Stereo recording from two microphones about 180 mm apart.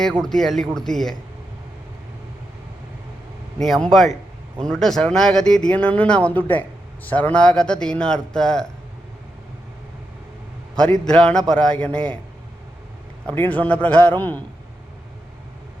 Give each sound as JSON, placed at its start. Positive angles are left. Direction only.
{"t": 0.2, "sound": "speech", "side_deg": 5}
{"t": 3.6, "sound": "speech", "side_deg": 5}
{"t": 10.8, "sound": "speech", "side_deg": 5}
{"t": 13.3, "sound": "a man's voice", "side_deg": 10}